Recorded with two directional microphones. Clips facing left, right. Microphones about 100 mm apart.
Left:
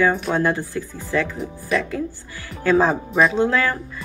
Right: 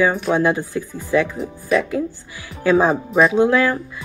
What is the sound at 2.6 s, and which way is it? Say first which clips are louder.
Speech: right 2 dB; 15° right (ahead or behind).